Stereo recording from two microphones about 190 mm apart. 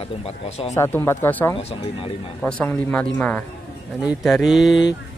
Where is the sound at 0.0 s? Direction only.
30° left (ahead or behind).